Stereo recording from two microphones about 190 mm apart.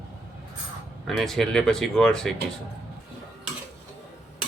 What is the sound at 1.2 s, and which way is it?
Speech, centre (ahead or behind).